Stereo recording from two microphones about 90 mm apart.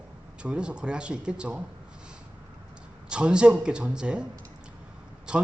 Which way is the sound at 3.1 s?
10° right (ahead or behind).